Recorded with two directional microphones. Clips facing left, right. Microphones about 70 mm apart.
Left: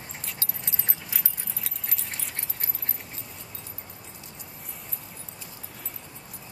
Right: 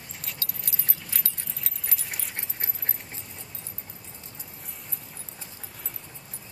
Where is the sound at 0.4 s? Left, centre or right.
Left.